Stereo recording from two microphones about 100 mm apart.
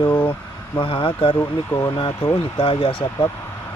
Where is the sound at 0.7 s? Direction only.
55° left (ahead or behind).